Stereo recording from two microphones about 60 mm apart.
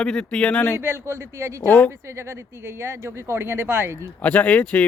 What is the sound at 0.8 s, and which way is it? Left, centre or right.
Speech, right.